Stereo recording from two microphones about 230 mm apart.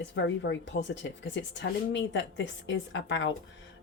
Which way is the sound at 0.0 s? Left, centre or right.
Left.